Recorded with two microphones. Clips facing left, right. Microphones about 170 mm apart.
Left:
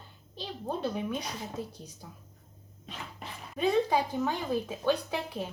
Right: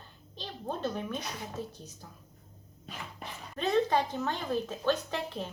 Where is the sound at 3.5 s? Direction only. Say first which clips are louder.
Left 1 dB; 10° left (ahead or behind).